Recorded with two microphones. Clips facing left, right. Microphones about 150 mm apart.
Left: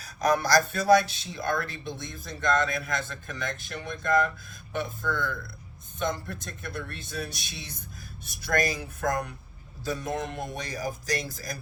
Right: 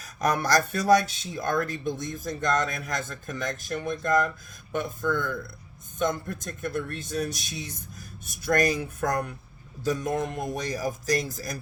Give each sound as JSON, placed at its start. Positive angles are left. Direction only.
{"t": 0.0, "sound": "speech", "side_deg": -50}